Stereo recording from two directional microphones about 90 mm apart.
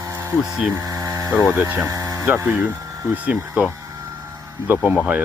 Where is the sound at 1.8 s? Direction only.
35° right (ahead or behind).